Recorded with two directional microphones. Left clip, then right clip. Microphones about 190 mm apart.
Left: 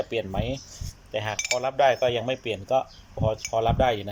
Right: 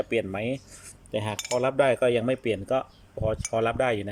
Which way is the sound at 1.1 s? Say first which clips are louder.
Left 1 dB; 20° right (ahead or behind).